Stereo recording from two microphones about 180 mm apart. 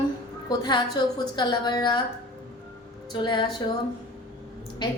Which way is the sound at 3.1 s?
25° left (ahead or behind).